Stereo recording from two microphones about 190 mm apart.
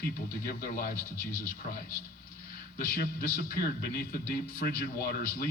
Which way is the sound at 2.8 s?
50° left (ahead or behind).